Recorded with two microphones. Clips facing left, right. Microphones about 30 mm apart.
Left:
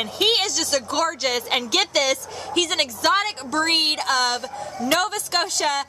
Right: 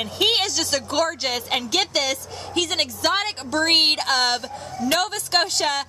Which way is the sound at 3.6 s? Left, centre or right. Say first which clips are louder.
Right 2 dB; right.